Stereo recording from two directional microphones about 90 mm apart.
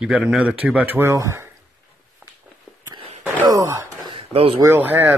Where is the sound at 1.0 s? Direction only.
30° right (ahead or behind).